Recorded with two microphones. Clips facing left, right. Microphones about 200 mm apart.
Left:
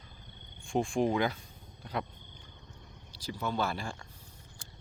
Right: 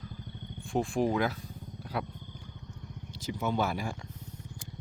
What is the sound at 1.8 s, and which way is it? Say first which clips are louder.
Wild animals: right 1 dB; 5° right (ahead or behind).